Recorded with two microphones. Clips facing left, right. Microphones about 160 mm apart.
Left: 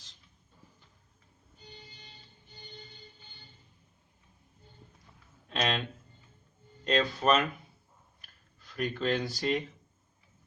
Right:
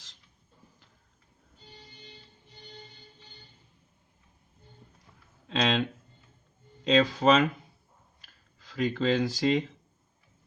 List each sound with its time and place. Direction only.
5.5 s a sound: 90° right
6.8 s speech: 90° right
8.5 s speech: 90° right